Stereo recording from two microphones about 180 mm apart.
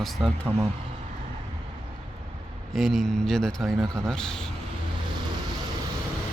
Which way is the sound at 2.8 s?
Centre (ahead or behind).